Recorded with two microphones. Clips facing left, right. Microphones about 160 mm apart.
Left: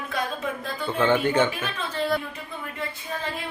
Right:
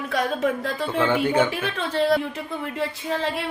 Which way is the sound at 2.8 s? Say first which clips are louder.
Right 6 dB; 80° right.